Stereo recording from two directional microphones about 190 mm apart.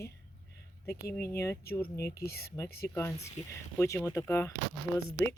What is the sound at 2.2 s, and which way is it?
Speech, 55° left (ahead or behind).